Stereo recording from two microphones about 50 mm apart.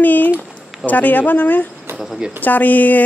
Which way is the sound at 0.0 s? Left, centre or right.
Left.